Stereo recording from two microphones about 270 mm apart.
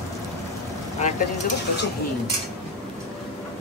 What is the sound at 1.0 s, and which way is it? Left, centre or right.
Speech, left.